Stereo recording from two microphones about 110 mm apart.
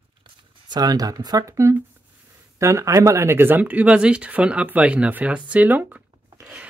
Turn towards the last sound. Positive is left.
turn(degrees=-15)  # may be behind; listen again after turning